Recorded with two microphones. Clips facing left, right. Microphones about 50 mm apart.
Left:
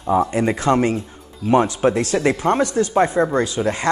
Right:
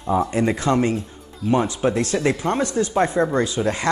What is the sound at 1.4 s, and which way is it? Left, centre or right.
Speech, centre.